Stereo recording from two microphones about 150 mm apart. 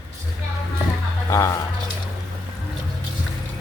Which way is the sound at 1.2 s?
20° left (ahead or behind).